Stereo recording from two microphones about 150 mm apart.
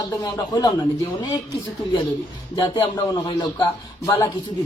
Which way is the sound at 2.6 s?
30° left (ahead or behind).